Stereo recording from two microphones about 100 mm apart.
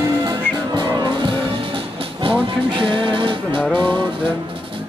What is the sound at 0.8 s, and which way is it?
Music, 55° right (ahead or behind).